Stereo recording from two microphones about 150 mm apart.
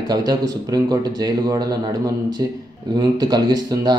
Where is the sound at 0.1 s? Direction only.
25° right (ahead or behind).